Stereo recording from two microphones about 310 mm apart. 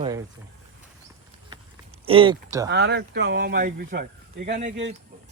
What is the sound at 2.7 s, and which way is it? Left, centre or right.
Speech, right.